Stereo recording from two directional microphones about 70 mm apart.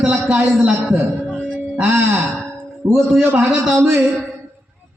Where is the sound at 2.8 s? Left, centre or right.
Right.